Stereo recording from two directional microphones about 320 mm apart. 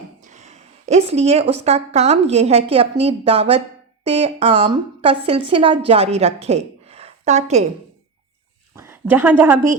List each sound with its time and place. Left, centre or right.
0.2 s a woman's voice: right
8.7 s a woman's voice: centre